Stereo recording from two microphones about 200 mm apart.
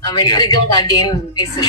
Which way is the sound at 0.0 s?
20° left (ahead or behind).